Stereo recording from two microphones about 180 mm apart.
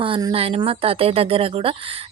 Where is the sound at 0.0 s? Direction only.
30° right (ahead or behind).